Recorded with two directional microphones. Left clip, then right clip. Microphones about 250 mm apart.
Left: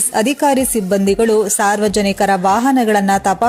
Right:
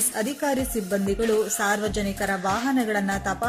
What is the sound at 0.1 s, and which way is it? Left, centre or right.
Speech, left.